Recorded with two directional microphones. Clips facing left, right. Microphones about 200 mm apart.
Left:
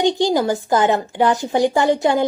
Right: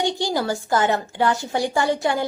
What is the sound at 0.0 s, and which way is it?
A woman's voice, 20° left (ahead or behind).